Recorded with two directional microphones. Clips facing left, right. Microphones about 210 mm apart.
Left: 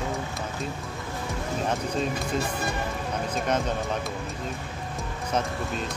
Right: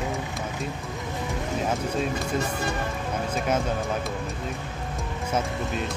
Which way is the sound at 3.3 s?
5° right (ahead or behind).